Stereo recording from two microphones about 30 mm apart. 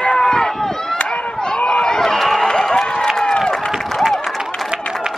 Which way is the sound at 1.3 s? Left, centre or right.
Left.